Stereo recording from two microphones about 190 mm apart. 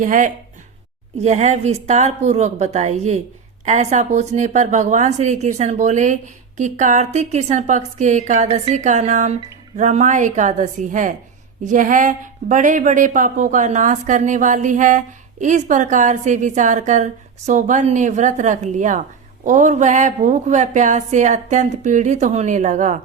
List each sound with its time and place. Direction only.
0.0 s a woman's voice: 45° right (ahead or behind)